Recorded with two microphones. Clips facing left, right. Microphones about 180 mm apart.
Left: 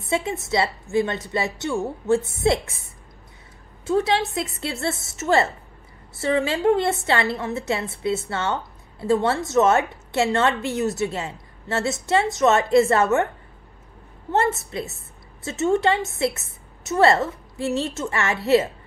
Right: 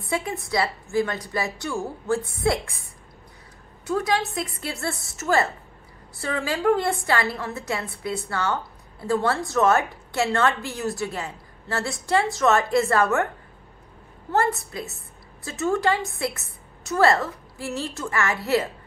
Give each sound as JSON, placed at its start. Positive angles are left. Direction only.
{"t": 0.0, "sound": "a woman's voice", "side_deg": 25}
{"t": 14.3, "sound": "a woman's voice", "side_deg": 25}